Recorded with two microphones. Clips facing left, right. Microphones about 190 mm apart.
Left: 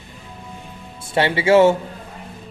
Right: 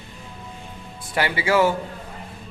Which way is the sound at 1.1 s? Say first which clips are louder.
Left 6 dB; 25° left (ahead or behind).